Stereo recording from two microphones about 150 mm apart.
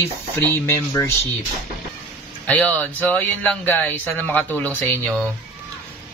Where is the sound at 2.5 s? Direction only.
10° left (ahead or behind).